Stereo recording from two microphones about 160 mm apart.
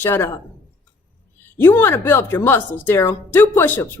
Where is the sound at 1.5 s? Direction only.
15° left (ahead or behind).